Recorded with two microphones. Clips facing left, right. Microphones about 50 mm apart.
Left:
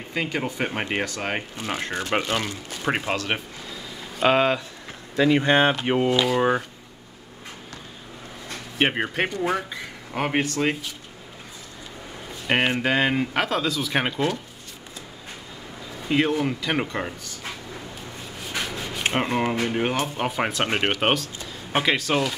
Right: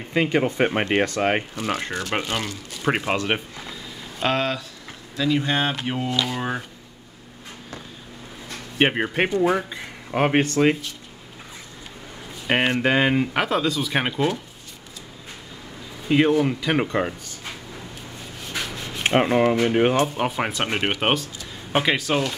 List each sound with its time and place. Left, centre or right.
0.1 s speech: centre
1.6 s speech: centre
4.2 s speech: centre
5.1 s speech: left; by 6.6 s centre
8.7 s speech: centre
12.4 s speech: centre
16.1 s speech: centre
16.8 s speech: centre
19.0 s speech: centre
19.6 s speech: right
20.1 s speech: centre
20.9 s speech: centre